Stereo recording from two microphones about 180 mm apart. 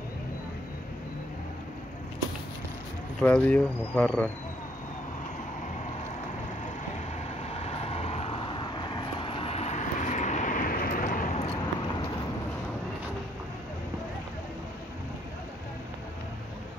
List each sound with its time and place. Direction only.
3.2 s speech: 5° left (ahead or behind)
7.5 s vehicle: 35° left (ahead or behind)